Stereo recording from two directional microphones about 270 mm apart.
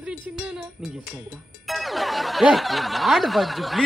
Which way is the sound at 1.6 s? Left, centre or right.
Centre.